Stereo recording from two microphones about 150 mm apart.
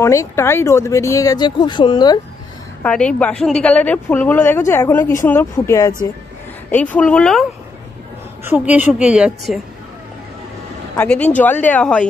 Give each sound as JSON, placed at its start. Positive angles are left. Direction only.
{"t": 0.0, "sound": "speech", "side_deg": 20}
{"t": 2.8, "sound": "a woman's voice", "side_deg": 5}
{"t": 6.7, "sound": "a woman's voice", "side_deg": 10}
{"t": 8.5, "sound": "a woman's voice", "side_deg": -10}
{"t": 11.0, "sound": "a woman's voice", "side_deg": 10}